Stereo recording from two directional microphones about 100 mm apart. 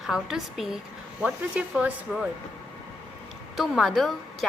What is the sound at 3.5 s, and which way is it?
Speech, 5° right (ahead or behind).